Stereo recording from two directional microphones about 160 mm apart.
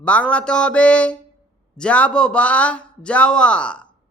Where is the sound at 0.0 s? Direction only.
10° left (ahead or behind).